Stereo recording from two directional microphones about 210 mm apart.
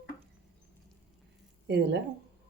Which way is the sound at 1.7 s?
55° right (ahead or behind).